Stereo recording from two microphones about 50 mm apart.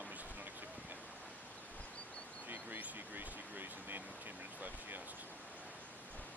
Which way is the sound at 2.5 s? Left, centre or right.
Right.